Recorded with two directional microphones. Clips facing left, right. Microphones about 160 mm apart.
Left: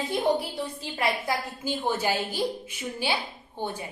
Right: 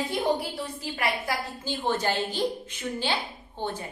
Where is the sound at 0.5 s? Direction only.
20° left (ahead or behind).